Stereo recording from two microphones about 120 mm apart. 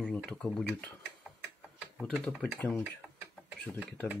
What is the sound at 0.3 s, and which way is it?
Speech, 5° left (ahead or behind).